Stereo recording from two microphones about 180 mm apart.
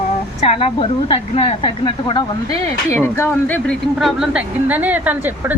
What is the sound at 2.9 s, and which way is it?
Speech, 15° left (ahead or behind).